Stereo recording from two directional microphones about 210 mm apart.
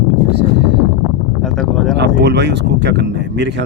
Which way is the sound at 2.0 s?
55° right (ahead or behind).